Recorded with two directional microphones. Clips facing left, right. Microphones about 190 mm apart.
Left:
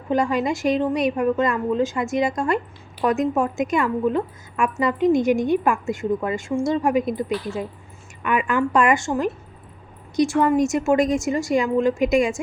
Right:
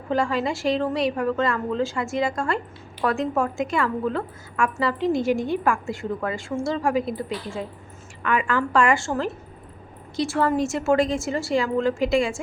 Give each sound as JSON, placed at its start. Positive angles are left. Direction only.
{"t": 0.1, "sound": "a woman's voice", "side_deg": 20}